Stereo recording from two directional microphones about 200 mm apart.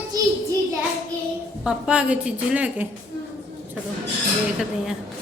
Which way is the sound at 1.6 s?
5° right (ahead or behind).